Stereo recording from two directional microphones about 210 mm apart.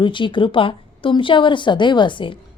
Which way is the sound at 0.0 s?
25° left (ahead or behind).